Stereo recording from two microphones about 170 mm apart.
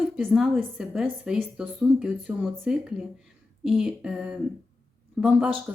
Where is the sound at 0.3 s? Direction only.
5° right (ahead or behind).